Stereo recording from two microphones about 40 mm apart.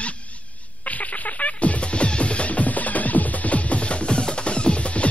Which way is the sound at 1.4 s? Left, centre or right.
Left.